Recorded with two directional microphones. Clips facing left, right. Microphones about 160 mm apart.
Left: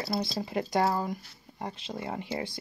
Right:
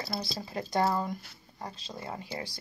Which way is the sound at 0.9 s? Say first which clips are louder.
Left 1 dB; 5° left (ahead or behind).